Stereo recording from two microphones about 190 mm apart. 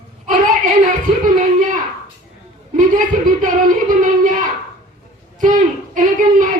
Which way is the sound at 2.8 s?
45° right (ahead or behind).